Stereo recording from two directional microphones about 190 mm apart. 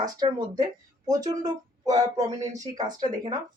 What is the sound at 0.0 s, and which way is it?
Speech, 20° right (ahead or behind).